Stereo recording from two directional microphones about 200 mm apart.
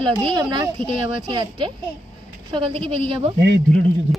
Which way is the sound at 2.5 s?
25° right (ahead or behind).